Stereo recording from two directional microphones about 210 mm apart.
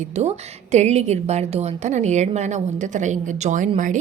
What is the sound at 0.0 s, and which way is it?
A woman's voice, 30° right (ahead or behind).